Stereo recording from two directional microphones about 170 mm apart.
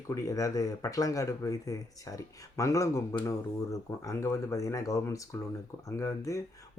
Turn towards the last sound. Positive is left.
turn(degrees=20)  # may be behind; listen again after turning